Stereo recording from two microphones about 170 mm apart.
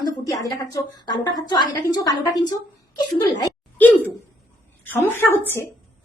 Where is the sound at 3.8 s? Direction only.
10° left (ahead or behind).